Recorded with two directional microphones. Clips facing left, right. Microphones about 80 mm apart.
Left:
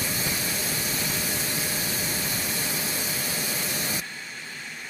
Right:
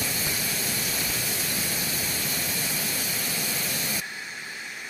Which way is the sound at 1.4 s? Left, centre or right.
Left.